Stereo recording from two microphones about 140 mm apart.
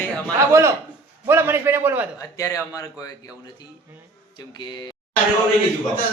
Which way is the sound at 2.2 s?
20° left (ahead or behind).